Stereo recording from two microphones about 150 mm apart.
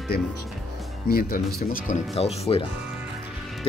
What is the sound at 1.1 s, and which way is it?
Speech, 80° left.